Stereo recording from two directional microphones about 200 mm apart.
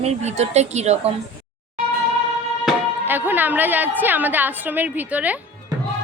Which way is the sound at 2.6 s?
10° right (ahead or behind).